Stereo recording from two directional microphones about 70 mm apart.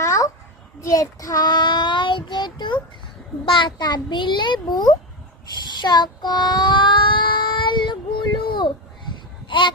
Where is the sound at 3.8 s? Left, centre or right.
Left.